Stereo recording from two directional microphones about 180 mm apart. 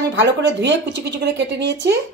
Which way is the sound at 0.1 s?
80° right.